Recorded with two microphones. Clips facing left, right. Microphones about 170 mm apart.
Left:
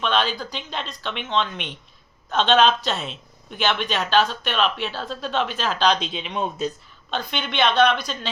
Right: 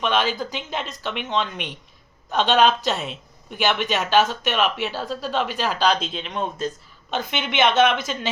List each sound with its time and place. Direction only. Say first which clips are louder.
0.0 s speech: right 1 dB; 15° right (ahead or behind); by 6.7 s 5° left (ahead or behind)
7.1 s speech: right 2 dB; 15° right (ahead or behind)